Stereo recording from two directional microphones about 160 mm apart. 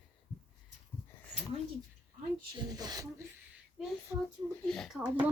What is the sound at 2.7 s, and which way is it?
Speech, 25° right (ahead or behind).